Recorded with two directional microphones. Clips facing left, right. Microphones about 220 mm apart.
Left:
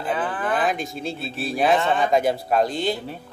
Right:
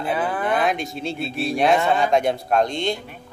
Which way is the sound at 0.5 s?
Centre (ahead or behind).